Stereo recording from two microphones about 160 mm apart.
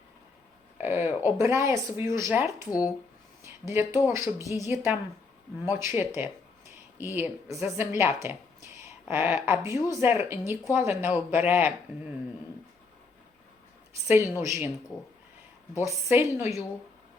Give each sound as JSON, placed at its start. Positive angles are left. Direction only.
{"t": 0.8, "sound": "speech", "side_deg": -15}
{"t": 2.6, "sound": "speech", "side_deg": 20}
{"t": 3.4, "sound": "a woman's voice", "side_deg": -15}
{"t": 14.1, "sound": "speech", "side_deg": -15}
{"t": 15.8, "sound": "speech", "side_deg": -15}